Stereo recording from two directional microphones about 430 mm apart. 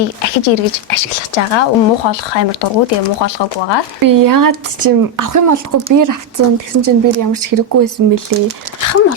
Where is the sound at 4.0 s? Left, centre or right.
Right.